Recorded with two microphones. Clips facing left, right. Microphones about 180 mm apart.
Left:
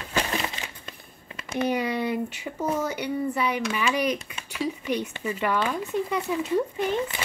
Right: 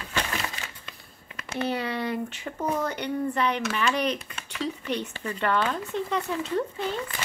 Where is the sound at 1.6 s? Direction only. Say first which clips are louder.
Left 3 dB; 15° left (ahead or behind).